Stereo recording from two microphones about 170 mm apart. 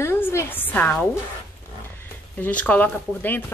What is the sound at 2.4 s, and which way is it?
Speech, 10° left (ahead or behind).